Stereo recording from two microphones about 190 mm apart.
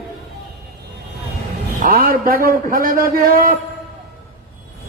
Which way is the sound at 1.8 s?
50° right (ahead or behind).